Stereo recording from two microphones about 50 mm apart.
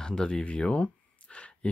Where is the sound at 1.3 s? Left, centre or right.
Left.